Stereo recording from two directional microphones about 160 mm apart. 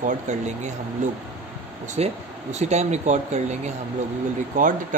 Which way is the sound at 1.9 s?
45° right (ahead or behind).